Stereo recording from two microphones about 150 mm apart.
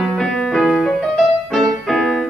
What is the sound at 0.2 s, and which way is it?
Music, 5° left (ahead or behind).